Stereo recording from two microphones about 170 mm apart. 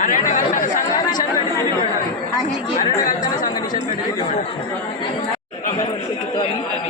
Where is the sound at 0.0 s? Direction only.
50° left (ahead or behind).